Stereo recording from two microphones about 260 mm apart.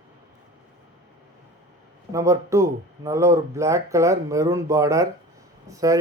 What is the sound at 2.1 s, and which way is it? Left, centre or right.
Speech, centre.